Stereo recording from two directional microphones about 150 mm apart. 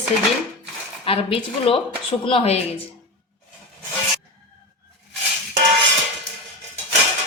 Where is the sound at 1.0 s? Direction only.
35° left (ahead or behind).